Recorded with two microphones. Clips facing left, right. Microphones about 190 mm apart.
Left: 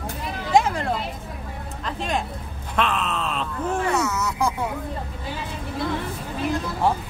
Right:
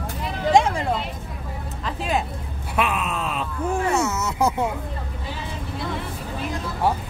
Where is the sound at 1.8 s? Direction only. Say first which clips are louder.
Right 2 dB; 5° right (ahead or behind).